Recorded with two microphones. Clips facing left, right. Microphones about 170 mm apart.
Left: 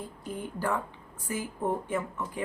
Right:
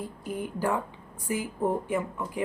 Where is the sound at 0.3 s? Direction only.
10° right (ahead or behind).